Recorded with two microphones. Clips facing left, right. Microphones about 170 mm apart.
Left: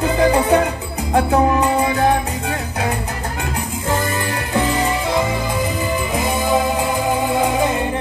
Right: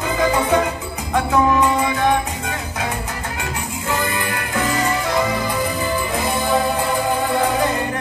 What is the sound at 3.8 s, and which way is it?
Music, 35° left (ahead or behind).